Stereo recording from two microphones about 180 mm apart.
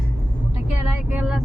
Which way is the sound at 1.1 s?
5° right (ahead or behind).